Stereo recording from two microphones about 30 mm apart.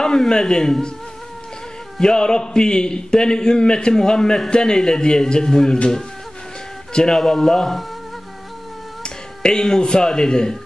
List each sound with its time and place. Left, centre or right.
0.0 s a man's voice: left
2.0 s a man's voice: left
6.9 s a man's voice: left
9.0 s speech: left